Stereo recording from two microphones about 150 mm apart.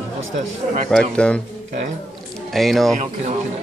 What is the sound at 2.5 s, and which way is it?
Speech, centre (ahead or behind).